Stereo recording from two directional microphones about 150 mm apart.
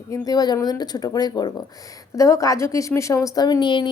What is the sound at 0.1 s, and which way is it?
A woman's voice, 25° left (ahead or behind).